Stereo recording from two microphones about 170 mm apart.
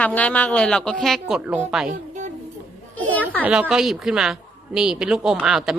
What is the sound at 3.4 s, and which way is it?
Speech, 5° right (ahead or behind).